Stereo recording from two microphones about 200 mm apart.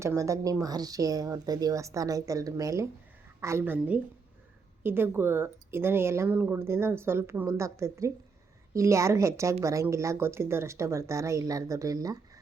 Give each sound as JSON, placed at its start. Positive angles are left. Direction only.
{"t": 0.0, "sound": "a woman's voice", "side_deg": -15}